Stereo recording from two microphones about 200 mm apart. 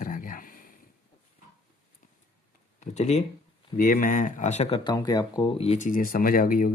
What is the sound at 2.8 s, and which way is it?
Speech, 35° left (ahead or behind).